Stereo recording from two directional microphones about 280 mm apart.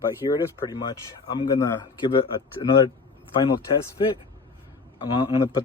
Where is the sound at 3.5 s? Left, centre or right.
Centre.